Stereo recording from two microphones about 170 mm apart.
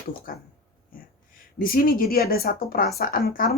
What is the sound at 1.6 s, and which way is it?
Speech, 60° left (ahead or behind).